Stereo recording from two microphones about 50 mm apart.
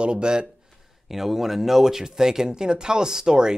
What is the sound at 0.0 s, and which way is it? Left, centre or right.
Speech, centre.